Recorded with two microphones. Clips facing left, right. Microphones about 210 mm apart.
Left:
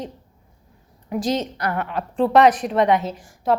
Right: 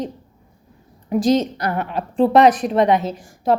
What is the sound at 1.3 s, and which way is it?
A woman's voice, 35° right (ahead or behind).